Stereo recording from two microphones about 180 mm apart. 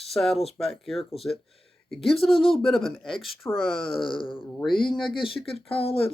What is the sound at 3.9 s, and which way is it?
Speech, 30° left (ahead or behind).